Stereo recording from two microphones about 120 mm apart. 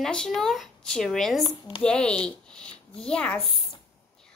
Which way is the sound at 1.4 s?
40° left (ahead or behind).